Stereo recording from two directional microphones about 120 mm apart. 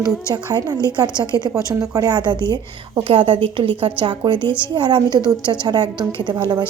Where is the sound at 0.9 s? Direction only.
35° right (ahead or behind).